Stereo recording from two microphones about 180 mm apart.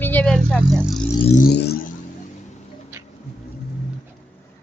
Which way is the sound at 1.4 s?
65° left (ahead or behind).